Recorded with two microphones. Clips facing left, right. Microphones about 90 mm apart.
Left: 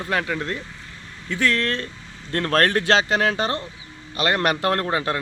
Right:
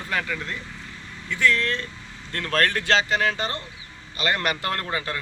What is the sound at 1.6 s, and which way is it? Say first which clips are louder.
Speech: left 2 dB; 55° left (ahead or behind).